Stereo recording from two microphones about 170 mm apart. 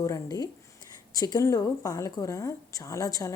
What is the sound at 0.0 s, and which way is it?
A woman's voice, 20° left (ahead or behind).